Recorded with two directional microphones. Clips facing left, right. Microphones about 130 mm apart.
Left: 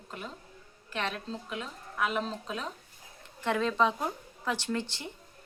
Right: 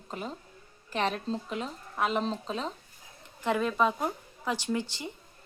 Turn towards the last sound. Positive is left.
turn(degrees=-15)  # may be behind; listen again after turning